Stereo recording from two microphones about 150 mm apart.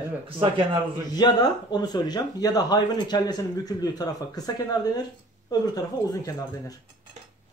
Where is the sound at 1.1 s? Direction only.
30° left (ahead or behind).